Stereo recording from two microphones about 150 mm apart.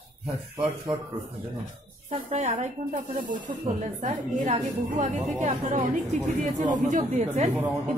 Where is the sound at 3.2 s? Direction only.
60° right (ahead or behind).